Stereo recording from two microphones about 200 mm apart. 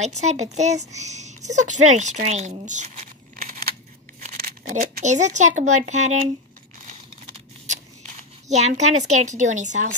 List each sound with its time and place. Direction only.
0.0 s a woman's voice: 35° right (ahead or behind)
8.5 s speech: 35° right (ahead or behind)